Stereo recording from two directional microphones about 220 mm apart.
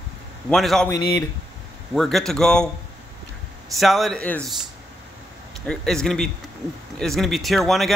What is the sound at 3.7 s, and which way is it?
Speech, centre (ahead or behind).